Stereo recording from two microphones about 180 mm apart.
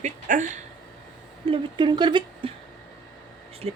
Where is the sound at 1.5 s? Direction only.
25° right (ahead or behind).